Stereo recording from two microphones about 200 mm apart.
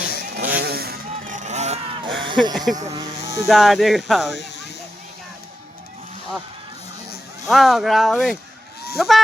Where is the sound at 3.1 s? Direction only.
60° left (ahead or behind).